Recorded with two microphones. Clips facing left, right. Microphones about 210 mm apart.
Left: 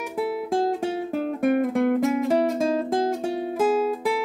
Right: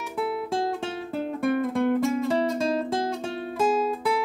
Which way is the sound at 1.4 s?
15° left (ahead or behind).